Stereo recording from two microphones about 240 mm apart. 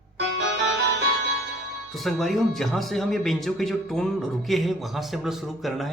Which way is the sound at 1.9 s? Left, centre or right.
Centre.